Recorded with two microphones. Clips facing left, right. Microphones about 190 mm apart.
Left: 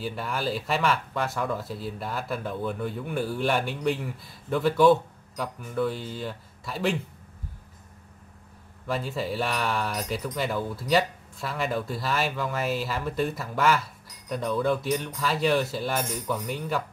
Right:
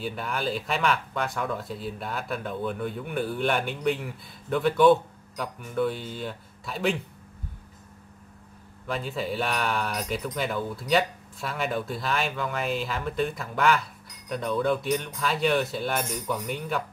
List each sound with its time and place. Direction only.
0.0 s speech: centre (ahead or behind)
8.8 s speech: centre (ahead or behind)